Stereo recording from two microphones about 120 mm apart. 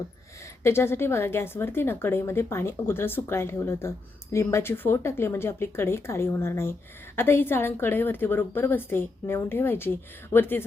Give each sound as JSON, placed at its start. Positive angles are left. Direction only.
{"t": 0.6, "sound": "a woman's voice", "side_deg": 20}